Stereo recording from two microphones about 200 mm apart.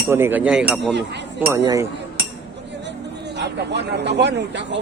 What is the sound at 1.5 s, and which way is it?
Speech, 15° right (ahead or behind).